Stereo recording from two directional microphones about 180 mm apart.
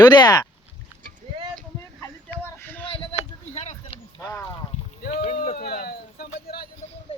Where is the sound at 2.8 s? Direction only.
30° left (ahead or behind).